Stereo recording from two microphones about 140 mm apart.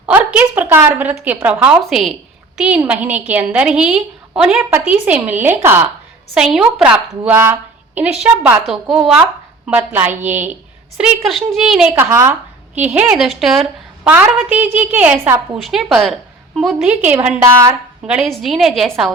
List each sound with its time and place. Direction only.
0.0 s a woman's voice: 10° right (ahead or behind)
1.9 s a woman's voice: centre (ahead or behind)
7.3 s a woman's voice: 15° right (ahead or behind)
11.9 s a woman's voice: 20° right (ahead or behind); by 14.1 s centre (ahead or behind)
14.1 s a woman's voice: 10° right (ahead or behind)
15.5 s a woman's voice: centre (ahead or behind)
16.7 s a woman's voice: 10° right (ahead or behind)
17.4 s a woman's voice: 20° right (ahead or behind)
18.0 s a woman's voice: 5° right (ahead or behind)